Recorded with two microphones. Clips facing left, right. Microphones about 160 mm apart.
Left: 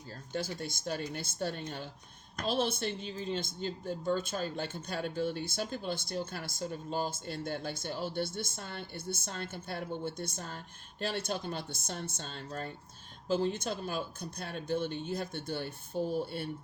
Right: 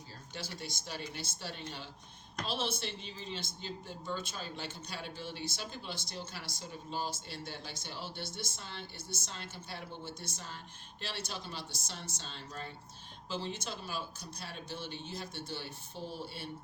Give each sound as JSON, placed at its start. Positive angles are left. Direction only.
{"t": 0.3, "sound": "speech", "side_deg": 50}